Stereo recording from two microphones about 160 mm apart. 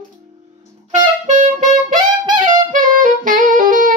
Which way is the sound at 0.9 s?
50° right (ahead or behind).